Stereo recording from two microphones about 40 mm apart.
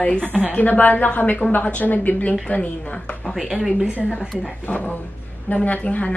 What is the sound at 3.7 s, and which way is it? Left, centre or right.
Speech, right.